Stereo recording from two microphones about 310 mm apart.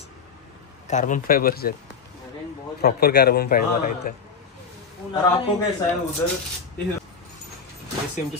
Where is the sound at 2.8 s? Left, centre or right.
Left.